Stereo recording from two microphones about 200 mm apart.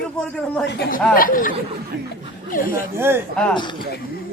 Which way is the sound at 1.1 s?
45° left (ahead or behind).